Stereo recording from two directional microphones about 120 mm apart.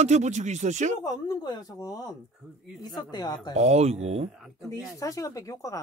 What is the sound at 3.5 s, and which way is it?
Speech, 60° right (ahead or behind).